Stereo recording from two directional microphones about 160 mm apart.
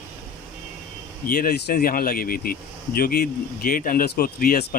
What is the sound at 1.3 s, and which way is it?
Speech, 70° left (ahead or behind).